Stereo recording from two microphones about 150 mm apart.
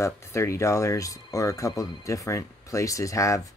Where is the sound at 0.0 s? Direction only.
20° left (ahead or behind).